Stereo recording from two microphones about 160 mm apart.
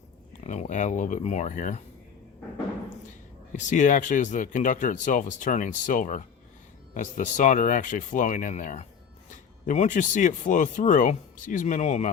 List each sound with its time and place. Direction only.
0.4 s speech: 45° left (ahead or behind)
3.5 s speech: 50° left (ahead or behind)